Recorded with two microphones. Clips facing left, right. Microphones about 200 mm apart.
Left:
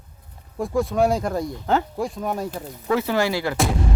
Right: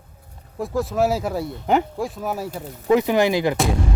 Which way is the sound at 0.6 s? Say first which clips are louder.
Left 1 dB; centre (ahead or behind).